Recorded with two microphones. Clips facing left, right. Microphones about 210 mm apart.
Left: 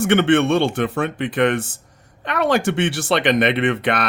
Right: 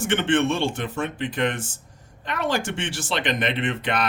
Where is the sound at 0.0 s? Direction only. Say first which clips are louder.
Left 6 dB; 65° left (ahead or behind).